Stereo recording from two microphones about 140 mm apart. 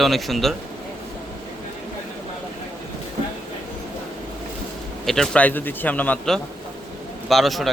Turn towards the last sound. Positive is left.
turn(degrees=0)  # may be behind; listen again after turning